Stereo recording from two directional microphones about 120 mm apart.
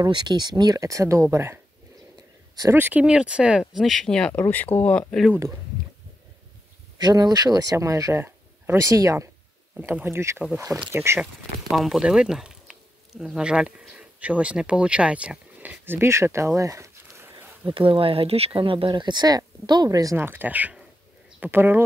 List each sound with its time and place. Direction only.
0.0 s speech: 35° right (ahead or behind); by 1.6 s 20° right (ahead or behind)
2.7 s speech: 15° right (ahead or behind); by 5.0 s 15° left (ahead or behind)
7.0 s speech: 30° right (ahead or behind)
11.7 s speech: centre (ahead or behind); by 17.5 s 20° right (ahead or behind)
17.6 s speech: 50° right (ahead or behind); by 20.2 s 30° right (ahead or behind)
20.2 s speech: 15° right (ahead or behind)